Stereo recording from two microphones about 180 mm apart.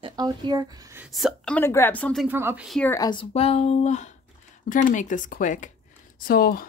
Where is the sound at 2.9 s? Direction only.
25° left (ahead or behind); by 6.6 s 55° left (ahead or behind).